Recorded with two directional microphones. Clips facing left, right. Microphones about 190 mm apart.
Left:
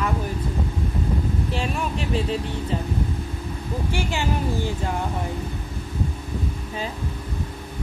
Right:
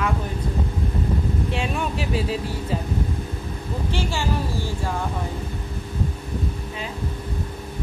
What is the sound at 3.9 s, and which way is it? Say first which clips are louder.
Speech: even; 15° left (ahead or behind).